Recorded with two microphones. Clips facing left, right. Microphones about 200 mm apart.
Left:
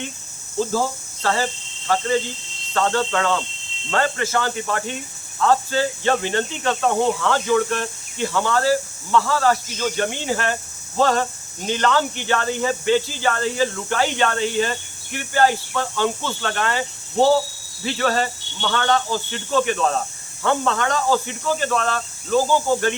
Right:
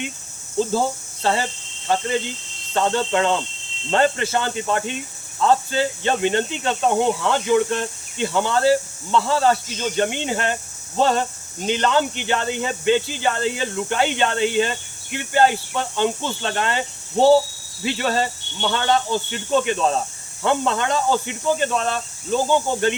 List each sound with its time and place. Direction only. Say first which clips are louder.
0.7 s hum: right 1 dB; 25° right (ahead or behind)
2.7 s speech: right 1 dB; 20° right (ahead or behind)
17.8 s speech: even; 20° right (ahead or behind)